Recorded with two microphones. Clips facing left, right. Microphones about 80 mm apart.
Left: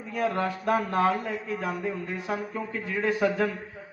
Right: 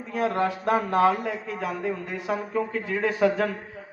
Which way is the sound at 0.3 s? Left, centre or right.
Right.